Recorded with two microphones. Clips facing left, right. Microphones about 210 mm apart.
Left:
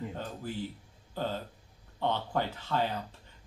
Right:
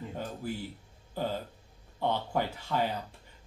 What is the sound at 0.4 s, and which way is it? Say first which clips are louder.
Speech: even; 10° right (ahead or behind).